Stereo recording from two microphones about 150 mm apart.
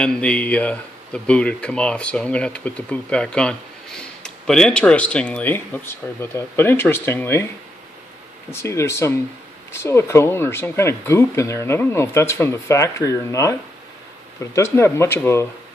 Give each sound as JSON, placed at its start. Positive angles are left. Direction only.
{"t": 0.0, "sound": "speech", "side_deg": 5}
{"t": 8.5, "sound": "speech", "side_deg": 15}